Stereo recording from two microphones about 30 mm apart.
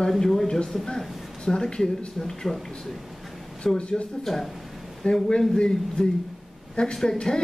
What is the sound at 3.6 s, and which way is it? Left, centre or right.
Speech, left.